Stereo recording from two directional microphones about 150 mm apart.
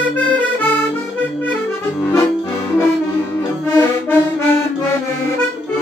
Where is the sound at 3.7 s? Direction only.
15° left (ahead or behind).